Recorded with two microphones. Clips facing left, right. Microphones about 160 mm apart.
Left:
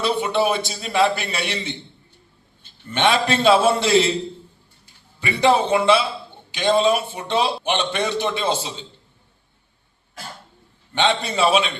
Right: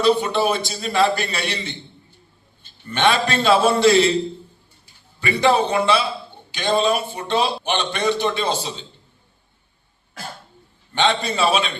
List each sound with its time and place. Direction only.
0.0 s a man's voice: 20° left (ahead or behind)
2.9 s a man's voice: 20° left (ahead or behind)
5.2 s a man's voice: 20° left (ahead or behind)
10.9 s a man's voice: 20° left (ahead or behind)